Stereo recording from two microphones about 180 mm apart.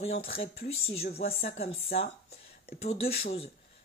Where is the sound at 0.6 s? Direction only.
55° left (ahead or behind).